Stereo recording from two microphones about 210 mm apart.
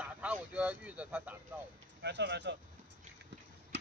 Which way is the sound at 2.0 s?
55° right (ahead or behind).